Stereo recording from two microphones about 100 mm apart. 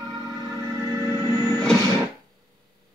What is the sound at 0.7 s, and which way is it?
Music, 30° right (ahead or behind).